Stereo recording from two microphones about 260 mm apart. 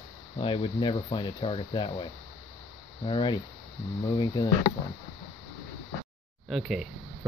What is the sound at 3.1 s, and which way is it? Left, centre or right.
Speech, centre.